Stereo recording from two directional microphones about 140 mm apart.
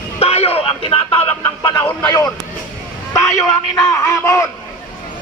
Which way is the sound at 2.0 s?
25° left (ahead or behind).